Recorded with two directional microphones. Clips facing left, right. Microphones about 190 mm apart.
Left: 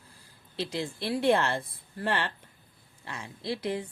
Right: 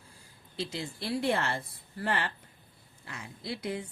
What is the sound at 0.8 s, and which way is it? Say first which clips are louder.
Speech: left 4 dB; 90° left.